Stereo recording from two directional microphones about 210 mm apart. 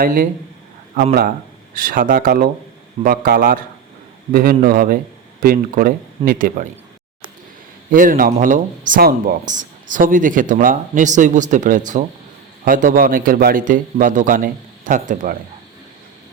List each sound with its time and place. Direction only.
0.0 s speech: 45° right (ahead or behind)
1.7 s speech: 40° right (ahead or behind)
7.9 s speech: 40° right (ahead or behind)